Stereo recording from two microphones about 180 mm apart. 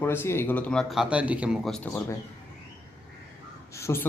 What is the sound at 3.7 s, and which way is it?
Speech, 15° left (ahead or behind).